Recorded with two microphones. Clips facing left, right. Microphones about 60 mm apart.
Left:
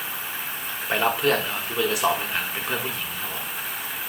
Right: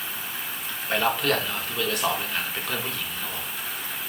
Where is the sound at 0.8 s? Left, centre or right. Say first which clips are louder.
Left 2 dB; centre.